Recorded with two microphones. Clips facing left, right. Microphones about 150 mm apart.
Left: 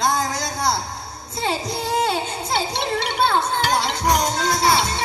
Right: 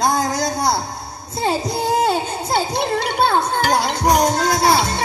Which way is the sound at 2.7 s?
45° right (ahead or behind).